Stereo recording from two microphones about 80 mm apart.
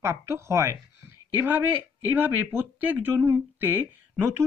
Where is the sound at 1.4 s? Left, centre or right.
Right.